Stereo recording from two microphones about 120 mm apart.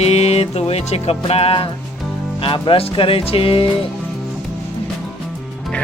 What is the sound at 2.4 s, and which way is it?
Music, 45° left (ahead or behind).